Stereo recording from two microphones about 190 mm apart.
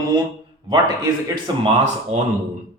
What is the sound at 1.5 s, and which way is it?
Speech, 25° right (ahead or behind).